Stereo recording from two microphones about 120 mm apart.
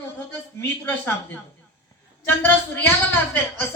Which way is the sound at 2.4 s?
20° left (ahead or behind).